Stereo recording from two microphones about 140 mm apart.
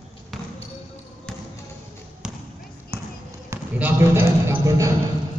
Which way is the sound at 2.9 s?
15° right (ahead or behind).